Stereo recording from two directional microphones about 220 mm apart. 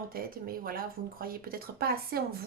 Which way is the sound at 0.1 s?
40° right (ahead or behind).